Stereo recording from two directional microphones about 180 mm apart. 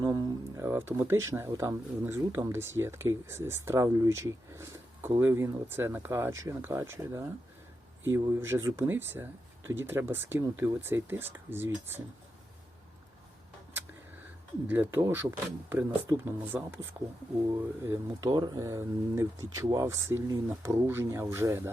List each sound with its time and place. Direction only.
0.0 s speech: 20° right (ahead or behind)
14.7 s speech: 10° right (ahead or behind)